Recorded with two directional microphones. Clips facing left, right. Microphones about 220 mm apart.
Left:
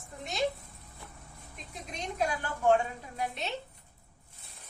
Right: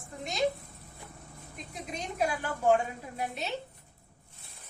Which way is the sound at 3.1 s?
5° right (ahead or behind).